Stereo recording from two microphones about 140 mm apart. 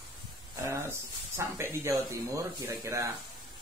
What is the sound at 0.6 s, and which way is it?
Speech, 20° right (ahead or behind).